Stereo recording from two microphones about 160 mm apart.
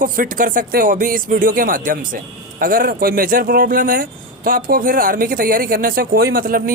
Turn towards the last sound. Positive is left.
turn(degrees=-60)  # may be behind; listen again after turning